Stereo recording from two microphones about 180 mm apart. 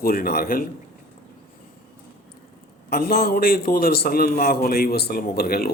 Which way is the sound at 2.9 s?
55° left (ahead or behind).